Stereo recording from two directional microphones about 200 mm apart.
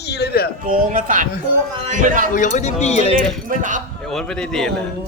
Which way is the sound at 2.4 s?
40° left (ahead or behind).